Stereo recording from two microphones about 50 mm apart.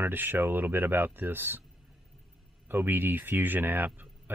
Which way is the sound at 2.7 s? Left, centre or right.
Right.